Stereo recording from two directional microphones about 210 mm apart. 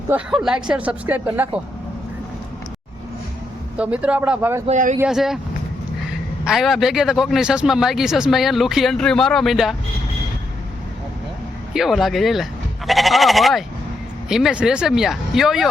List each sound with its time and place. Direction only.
0.1 s speech: centre (ahead or behind)
3.8 s a man's voice: 5° right (ahead or behind)
4.6 s speech: 35° right (ahead or behind)
4.9 s a man's voice: centre (ahead or behind)
6.4 s a man's voice: centre (ahead or behind)
11.7 s a man's voice: centre (ahead or behind)